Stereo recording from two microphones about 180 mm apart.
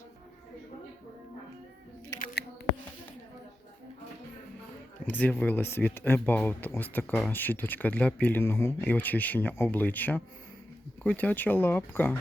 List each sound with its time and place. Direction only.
5.0 s speech: 10° left (ahead or behind)